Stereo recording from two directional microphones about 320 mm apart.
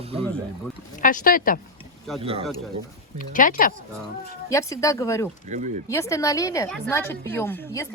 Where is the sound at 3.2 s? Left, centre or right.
Left.